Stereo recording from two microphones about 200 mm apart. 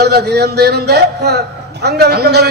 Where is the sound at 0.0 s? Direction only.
55° right (ahead or behind).